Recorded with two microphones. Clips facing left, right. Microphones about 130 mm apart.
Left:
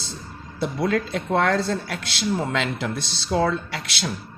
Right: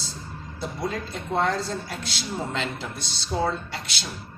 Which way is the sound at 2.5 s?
90° left.